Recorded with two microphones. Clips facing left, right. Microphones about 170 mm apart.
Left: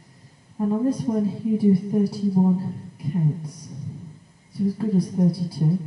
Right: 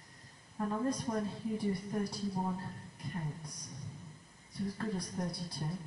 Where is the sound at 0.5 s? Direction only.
20° left (ahead or behind).